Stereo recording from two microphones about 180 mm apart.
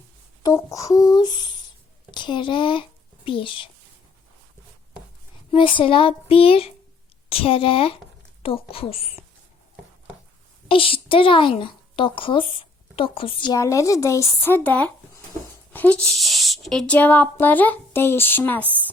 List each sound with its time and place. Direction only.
0.4 s speech: 20° left (ahead or behind)
5.5 s speech: 30° left (ahead or behind)
10.7 s speech: 30° left (ahead or behind); by 18.6 s 10° left (ahead or behind)
18.6 s speech: 10° right (ahead or behind)